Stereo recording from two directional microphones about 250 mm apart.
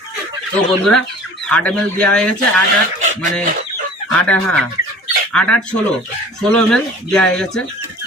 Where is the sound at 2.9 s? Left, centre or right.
Right.